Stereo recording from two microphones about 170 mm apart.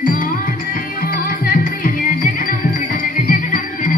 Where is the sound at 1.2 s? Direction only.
55° left (ahead or behind).